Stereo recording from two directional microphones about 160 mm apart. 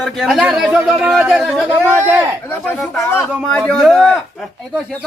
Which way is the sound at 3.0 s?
15° left (ahead or behind).